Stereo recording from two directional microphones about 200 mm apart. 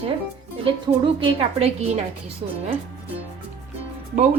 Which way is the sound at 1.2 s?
30° right (ahead or behind).